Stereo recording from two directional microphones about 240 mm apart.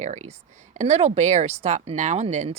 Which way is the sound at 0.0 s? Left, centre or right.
Right.